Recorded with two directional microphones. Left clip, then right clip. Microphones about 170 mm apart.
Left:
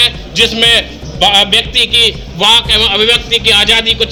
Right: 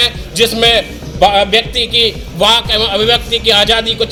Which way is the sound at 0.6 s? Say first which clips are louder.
Left 1 dB; 15° right (ahead or behind).